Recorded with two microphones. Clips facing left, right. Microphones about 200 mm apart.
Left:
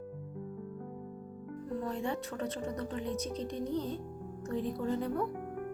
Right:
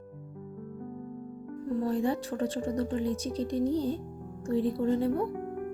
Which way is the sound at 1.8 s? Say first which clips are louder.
Right 7 dB; 35° right (ahead or behind).